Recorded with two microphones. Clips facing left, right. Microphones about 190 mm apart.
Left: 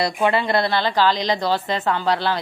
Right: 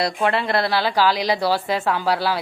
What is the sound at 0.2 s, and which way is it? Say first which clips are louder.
A woman's voice: left 3 dB; centre (ahead or behind).